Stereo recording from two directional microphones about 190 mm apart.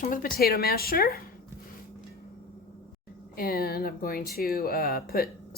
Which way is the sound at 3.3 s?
50° left (ahead or behind).